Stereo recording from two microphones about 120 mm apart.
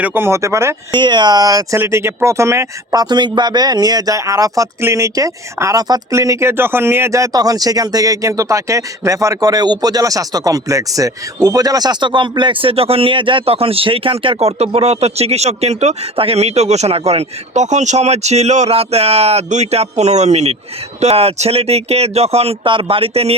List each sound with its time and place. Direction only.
0.0 s speech: 20° right (ahead or behind)
0.9 s speech: 40° right (ahead or behind); by 16.0 s 70° right (ahead or behind)
16.1 s speech: 55° right (ahead or behind)